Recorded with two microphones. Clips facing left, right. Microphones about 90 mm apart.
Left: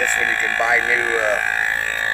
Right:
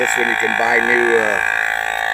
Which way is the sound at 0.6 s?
80° right.